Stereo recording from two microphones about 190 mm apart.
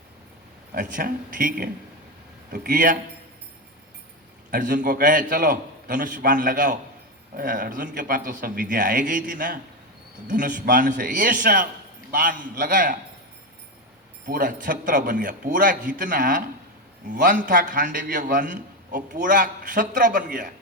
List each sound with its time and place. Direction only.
0.7 s a man's voice: 45° right (ahead or behind)
4.5 s a man's voice: 50° right (ahead or behind)
14.3 s a man's voice: 50° right (ahead or behind)